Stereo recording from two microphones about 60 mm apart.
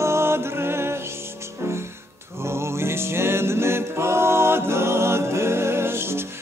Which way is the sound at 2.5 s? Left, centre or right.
Right.